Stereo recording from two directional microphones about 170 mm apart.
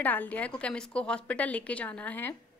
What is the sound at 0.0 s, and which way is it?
A woman's voice, 10° left (ahead or behind).